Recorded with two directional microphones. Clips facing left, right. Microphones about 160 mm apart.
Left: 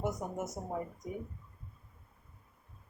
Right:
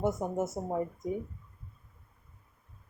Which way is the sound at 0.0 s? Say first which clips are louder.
Right 6 dB; 25° right (ahead or behind).